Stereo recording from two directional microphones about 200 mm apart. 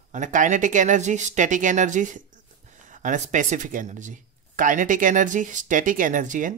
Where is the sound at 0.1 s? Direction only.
40° right (ahead or behind).